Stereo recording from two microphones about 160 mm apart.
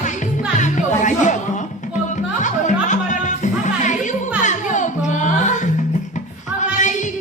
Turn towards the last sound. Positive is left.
turn(degrees=50)  # may be behind; listen again after turning